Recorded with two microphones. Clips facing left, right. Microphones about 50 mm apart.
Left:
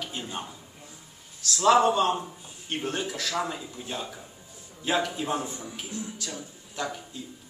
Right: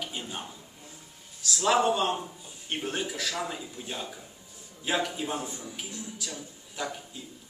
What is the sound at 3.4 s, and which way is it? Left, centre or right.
A man's voice, centre.